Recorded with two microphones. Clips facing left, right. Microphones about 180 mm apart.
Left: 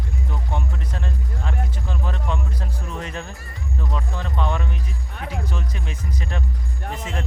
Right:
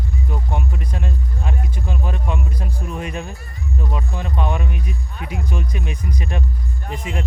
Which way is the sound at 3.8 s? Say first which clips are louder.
Right 2 dB; 15° right (ahead or behind).